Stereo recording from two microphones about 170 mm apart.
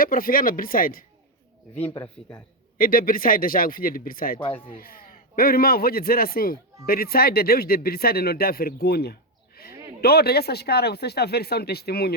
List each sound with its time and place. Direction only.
0.0 s speech: 60° left (ahead or behind)
1.7 s speech: 10° left (ahead or behind)
2.7 s a man's voice: 60° left (ahead or behind)